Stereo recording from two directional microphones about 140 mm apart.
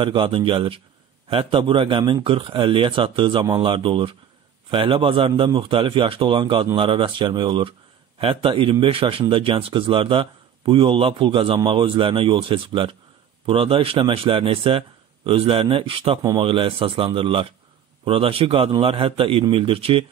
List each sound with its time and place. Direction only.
0.0 s a man's voice: 40° right (ahead or behind)
16.2 s speech: 25° right (ahead or behind)
16.4 s a man's voice: 40° right (ahead or behind)